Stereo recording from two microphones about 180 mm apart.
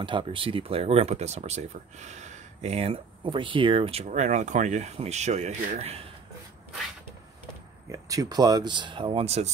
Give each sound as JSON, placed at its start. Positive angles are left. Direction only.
{"t": 0.0, "sound": "speech", "side_deg": -30}
{"t": 7.9, "sound": "speech", "side_deg": -20}